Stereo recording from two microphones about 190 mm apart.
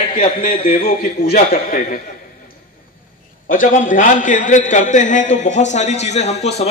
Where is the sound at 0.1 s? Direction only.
45° left (ahead or behind).